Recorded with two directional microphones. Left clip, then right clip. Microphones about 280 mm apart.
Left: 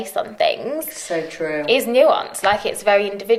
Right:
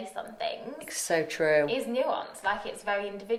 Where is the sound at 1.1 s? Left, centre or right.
Right.